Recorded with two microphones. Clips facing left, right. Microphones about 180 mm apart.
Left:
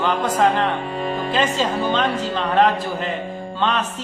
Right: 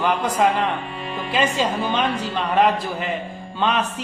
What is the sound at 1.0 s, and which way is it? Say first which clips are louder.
Music: left 6 dB; 40° left (ahead or behind).